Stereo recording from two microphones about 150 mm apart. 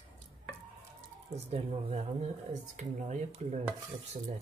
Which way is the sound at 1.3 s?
45° right (ahead or behind).